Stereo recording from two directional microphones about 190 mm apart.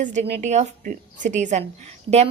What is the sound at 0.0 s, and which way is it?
A woman's voice, 40° right (ahead or behind).